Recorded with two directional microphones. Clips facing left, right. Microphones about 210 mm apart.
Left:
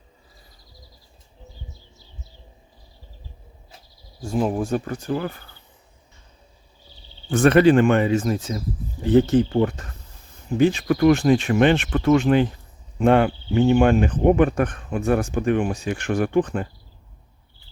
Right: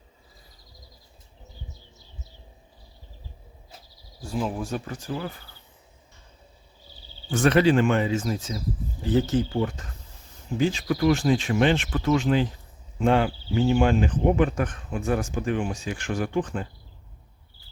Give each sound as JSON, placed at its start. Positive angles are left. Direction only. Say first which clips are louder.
{"t": 4.2, "sound": "speech", "louder": "left 6 dB", "side_deg": 50}
{"t": 7.3, "sound": "speech", "louder": "left 5 dB", "side_deg": 55}